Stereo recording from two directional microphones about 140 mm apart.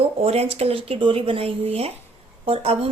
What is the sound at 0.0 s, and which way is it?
A woman's voice, 45° right (ahead or behind).